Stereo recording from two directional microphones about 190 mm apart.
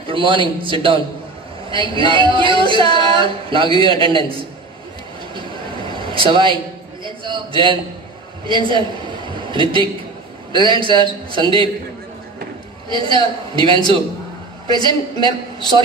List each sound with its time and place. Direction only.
0.0 s speech: 25° right (ahead or behind)
5.3 s a sound: 25° right (ahead or behind)
7.1 s a man's voice: 25° right (ahead or behind)
12.9 s speech: 25° right (ahead or behind)